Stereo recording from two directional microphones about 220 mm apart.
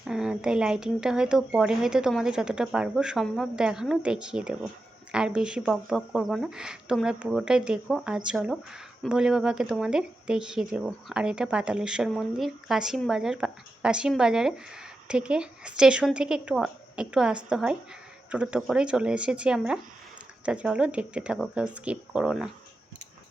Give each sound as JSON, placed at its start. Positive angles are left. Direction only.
{"t": 0.0, "sound": "speech", "side_deg": -5}